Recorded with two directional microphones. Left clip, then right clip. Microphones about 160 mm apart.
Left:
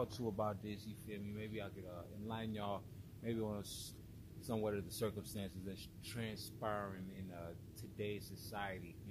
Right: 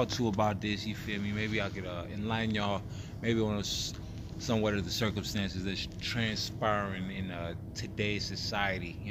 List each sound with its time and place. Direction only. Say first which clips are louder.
0.0 s speech: right 11 dB; 10° left (ahead or behind)